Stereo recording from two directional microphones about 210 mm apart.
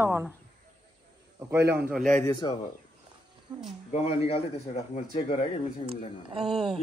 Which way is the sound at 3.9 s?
30° left (ahead or behind).